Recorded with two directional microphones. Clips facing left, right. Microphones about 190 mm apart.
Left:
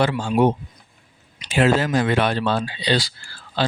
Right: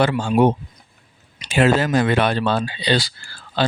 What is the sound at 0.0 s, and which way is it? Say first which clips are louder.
Speech: right 2 dB; 60° right (ahead or behind).